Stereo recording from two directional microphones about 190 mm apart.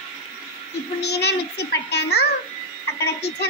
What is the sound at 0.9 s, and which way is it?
Child singing, 60° left (ahead or behind).